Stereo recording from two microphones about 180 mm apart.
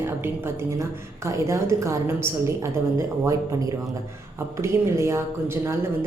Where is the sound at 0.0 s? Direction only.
15° right (ahead or behind).